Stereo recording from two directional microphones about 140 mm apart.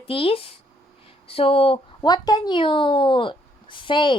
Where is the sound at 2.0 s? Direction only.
30° left (ahead or behind).